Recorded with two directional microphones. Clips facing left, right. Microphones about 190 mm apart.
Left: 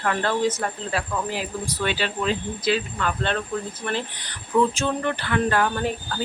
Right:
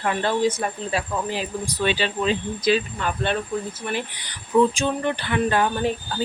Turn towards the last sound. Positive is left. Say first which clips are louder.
# right 1 dB
turn(degrees=-20)  # may be behind; listen again after turning